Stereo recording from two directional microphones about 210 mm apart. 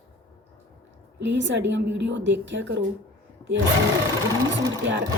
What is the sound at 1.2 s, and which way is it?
A woman's voice, 60° right (ahead or behind).